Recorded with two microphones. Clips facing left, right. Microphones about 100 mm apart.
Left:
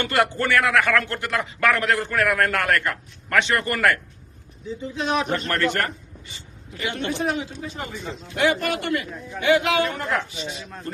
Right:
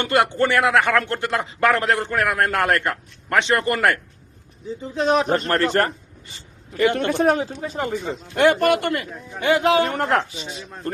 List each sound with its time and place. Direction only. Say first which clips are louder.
0.0 s speech: right 3 dB; 25° right (ahead or behind)
4.8 s speech: right 5 dB; 35° right (ahead or behind)
6.7 s speech: right 8 dB; 55° right (ahead or behind)
9.4 s speech: right 2 dB; 35° right (ahead or behind)
10.0 s speech: right 5 dB; 45° right (ahead or behind)